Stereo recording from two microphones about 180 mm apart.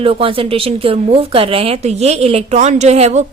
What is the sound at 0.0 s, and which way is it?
Speech, 30° right (ahead or behind).